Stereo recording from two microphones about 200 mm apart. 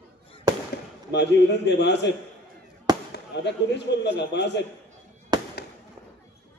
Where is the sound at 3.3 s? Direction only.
60° left (ahead or behind).